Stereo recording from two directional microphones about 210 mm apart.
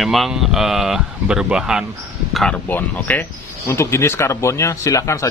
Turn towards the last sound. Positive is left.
turn(degrees=15)  # may be behind; listen again after turning